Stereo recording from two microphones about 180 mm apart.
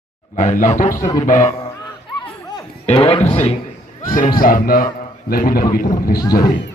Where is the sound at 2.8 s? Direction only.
35° left (ahead or behind).